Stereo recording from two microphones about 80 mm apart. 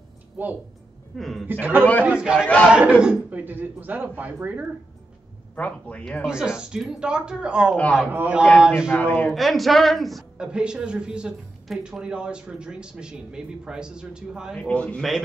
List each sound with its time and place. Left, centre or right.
0.4 s a man's voice: right
1.1 s a man's voice: centre
1.5 s a man's voice: right
2.0 s a man's voice: centre
5.6 s speech: centre
6.2 s speech: centre
7.7 s speech: centre
8.1 s a man's voice: right
8.5 s speech: centre
8.9 s a man's voice: centre
9.3 s a woman's voice: centre
10.3 s speech: centre
14.6 s speech: centre